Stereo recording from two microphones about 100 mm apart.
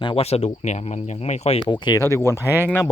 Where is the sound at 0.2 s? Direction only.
90° left.